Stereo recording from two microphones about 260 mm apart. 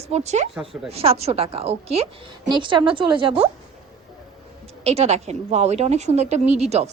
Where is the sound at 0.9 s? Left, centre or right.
Right.